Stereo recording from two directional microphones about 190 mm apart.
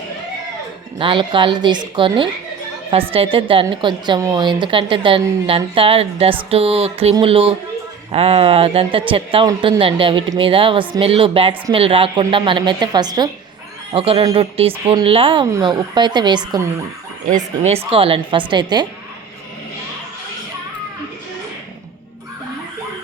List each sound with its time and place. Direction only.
0.9 s speech: 25° right (ahead or behind)
17.2 s speech: 40° right (ahead or behind); by 18.9 s 25° right (ahead or behind)